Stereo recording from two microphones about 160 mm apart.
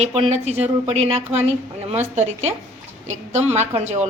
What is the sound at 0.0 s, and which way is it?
A woman's voice, 45° right (ahead or behind).